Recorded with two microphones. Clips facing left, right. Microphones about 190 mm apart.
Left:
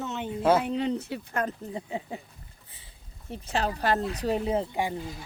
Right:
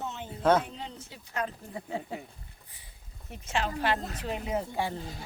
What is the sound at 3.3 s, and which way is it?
Speech, 40° left (ahead or behind).